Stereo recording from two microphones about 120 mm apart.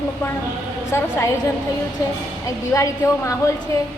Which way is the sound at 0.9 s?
20° left (ahead or behind).